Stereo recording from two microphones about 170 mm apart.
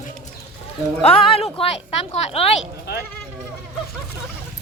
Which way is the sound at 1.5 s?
35° left (ahead or behind).